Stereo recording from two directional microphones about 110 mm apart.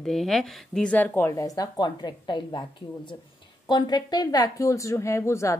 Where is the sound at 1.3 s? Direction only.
35° left (ahead or behind).